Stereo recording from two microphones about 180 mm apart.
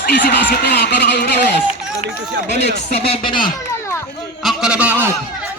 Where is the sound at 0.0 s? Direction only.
65° left (ahead or behind).